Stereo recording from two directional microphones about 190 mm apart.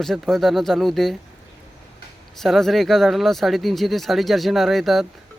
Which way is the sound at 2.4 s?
Centre (ahead or behind).